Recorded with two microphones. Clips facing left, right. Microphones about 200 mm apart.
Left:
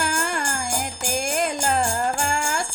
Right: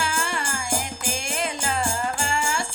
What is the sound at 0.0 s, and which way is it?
Music, 45° left (ahead or behind).